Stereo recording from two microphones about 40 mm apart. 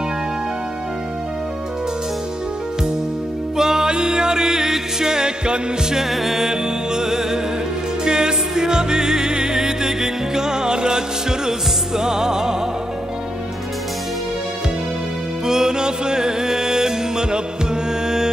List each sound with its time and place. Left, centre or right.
3.5 s music: centre
6.0 s music: centre
15.4 s music: centre